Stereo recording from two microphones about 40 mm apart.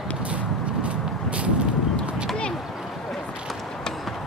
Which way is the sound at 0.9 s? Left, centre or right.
Right.